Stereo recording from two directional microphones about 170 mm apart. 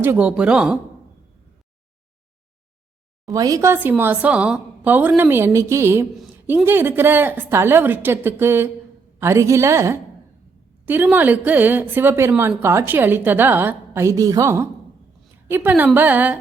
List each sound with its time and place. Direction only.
0.0 s a woman's voice: 10° right (ahead or behind)
3.2 s a woman's voice: 20° right (ahead or behind)